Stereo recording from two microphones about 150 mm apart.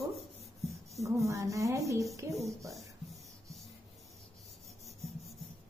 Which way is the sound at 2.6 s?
Centre (ahead or behind).